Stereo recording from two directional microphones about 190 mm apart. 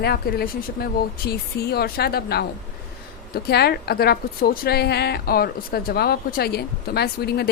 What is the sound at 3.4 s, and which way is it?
A woman's voice, 55° left (ahead or behind).